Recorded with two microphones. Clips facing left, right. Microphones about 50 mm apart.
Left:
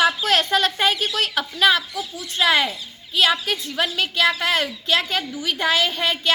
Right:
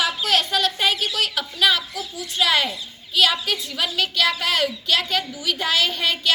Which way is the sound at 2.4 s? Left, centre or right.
Left.